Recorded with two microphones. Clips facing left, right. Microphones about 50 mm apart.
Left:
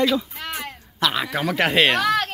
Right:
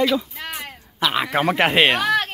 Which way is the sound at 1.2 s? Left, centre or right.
Right.